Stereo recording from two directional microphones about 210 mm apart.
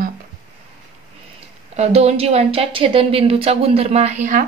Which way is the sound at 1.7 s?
30° right (ahead or behind).